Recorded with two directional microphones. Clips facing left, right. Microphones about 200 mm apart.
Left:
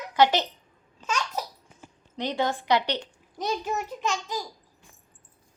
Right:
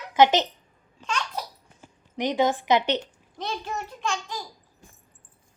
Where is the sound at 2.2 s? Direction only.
15° right (ahead or behind).